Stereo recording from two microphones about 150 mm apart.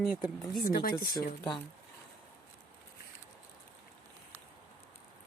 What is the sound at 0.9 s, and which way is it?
Speech, 80° left.